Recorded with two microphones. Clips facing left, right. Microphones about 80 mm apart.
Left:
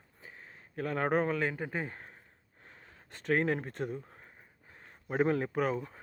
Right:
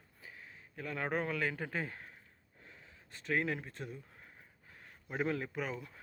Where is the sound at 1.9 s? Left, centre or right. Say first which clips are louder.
Left 2 dB; left.